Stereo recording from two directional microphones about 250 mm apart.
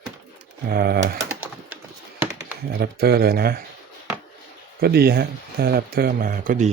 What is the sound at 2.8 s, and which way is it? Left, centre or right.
Speech, right.